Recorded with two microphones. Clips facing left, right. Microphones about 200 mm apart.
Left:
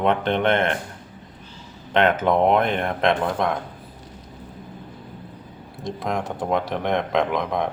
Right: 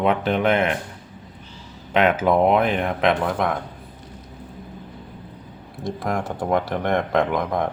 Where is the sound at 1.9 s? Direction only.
5° right (ahead or behind).